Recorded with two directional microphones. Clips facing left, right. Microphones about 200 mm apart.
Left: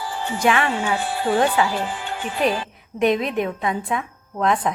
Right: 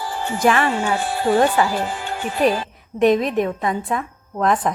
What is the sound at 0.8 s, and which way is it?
Speech, 45° right (ahead or behind).